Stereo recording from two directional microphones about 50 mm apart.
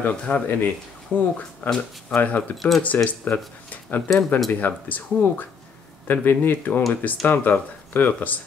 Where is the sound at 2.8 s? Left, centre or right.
Left.